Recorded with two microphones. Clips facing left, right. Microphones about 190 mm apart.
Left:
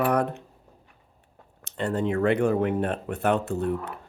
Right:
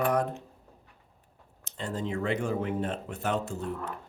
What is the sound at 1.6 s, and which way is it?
Speech, 65° left (ahead or behind).